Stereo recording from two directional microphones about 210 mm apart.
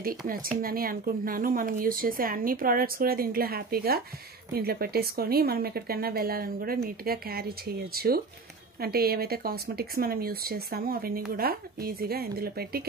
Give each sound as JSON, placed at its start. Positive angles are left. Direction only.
{"t": 0.3, "sound": "speech", "side_deg": -45}